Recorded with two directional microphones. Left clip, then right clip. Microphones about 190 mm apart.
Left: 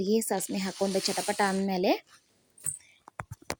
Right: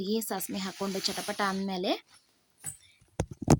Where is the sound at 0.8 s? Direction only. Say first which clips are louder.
Left 7 dB; 5° left (ahead or behind).